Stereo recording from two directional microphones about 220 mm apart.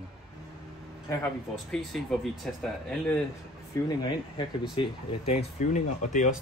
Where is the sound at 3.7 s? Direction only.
15° left (ahead or behind).